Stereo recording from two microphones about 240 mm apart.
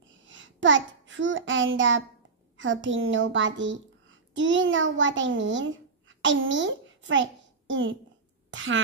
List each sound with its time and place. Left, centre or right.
0.3 s child singing: right
2.5 s a child's voice: right
8.5 s a sound: right